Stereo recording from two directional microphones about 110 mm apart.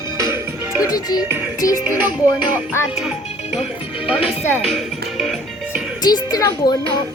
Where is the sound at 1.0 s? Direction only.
35° left (ahead or behind).